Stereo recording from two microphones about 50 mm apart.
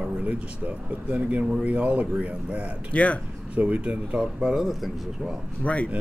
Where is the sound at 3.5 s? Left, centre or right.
Right.